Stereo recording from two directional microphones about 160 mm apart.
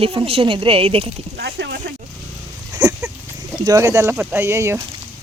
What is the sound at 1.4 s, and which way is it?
Speech, 85° right.